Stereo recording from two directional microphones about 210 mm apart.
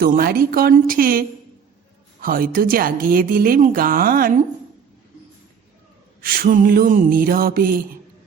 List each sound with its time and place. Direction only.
0.0 s speech: 45° right (ahead or behind)
2.2 s speech: 45° right (ahead or behind)
6.2 s speech: 45° right (ahead or behind)